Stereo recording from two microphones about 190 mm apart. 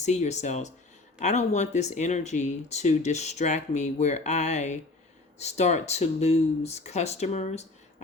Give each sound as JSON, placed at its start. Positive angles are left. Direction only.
{"t": 0.0, "sound": "speech", "side_deg": 35}